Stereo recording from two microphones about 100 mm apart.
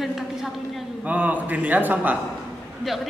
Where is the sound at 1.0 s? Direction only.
15° right (ahead or behind).